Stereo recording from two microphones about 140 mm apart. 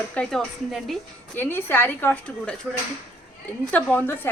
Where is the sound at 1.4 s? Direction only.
15° left (ahead or behind).